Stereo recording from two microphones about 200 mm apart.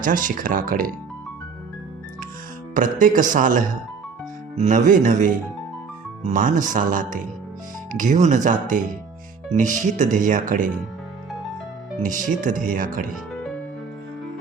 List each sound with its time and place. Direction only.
0.0 s speech: 40° right (ahead or behind)
2.7 s speech: 40° right (ahead or behind)
12.0 s speech: 40° right (ahead or behind)
13.3 s music: 5° left (ahead or behind)